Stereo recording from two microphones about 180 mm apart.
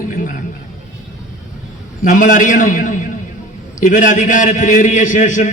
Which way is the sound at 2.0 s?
45° left (ahead or behind).